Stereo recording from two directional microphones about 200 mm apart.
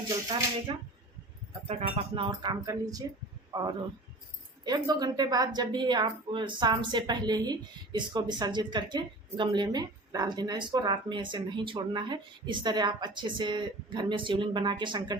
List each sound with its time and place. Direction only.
0.7 s a woman's voice: 25° right (ahead or behind)